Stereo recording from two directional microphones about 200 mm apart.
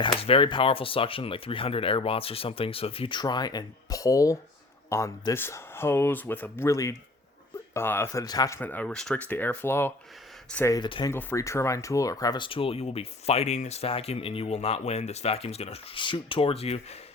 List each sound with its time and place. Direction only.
0.0 s speech: 25° left (ahead or behind)
11.1 s speech: 10° left (ahead or behind); by 17.0 s 30° left (ahead or behind)